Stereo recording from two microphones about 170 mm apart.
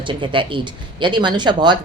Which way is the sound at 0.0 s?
30° right (ahead or behind).